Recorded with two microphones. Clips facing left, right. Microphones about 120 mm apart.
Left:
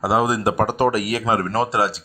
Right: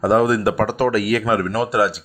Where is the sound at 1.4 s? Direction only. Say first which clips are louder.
Right 2 dB; 40° left (ahead or behind).